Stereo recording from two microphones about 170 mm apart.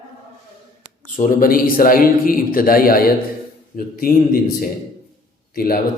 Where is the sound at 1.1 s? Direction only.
55° left (ahead or behind).